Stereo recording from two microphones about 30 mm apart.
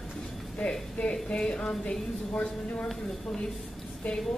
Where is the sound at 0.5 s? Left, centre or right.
Left.